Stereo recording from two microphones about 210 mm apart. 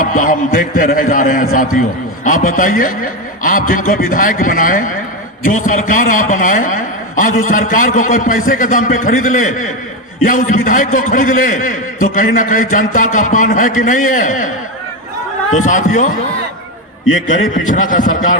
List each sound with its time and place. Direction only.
0.2 s a man's voice: 40° left (ahead or behind)
15.5 s a man's voice: 35° left (ahead or behind)
17.5 s a man's voice: 40° left (ahead or behind)